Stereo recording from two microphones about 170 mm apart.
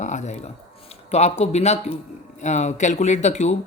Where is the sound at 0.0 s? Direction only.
45° left (ahead or behind).